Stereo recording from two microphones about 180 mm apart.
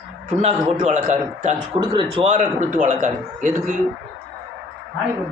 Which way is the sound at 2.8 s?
45° right (ahead or behind).